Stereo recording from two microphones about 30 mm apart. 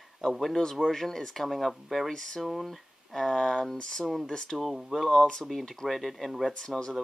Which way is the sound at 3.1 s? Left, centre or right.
Centre.